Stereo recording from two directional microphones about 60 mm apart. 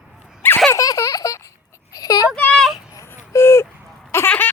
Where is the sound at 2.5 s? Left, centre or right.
Centre.